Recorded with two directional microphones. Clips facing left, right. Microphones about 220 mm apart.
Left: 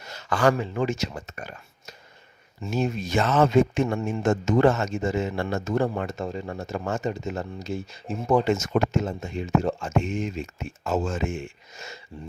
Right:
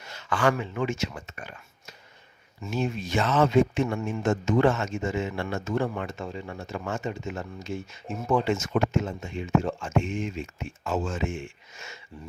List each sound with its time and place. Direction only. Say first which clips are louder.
0.1 s speech: left 3 dB; 40° left (ahead or behind)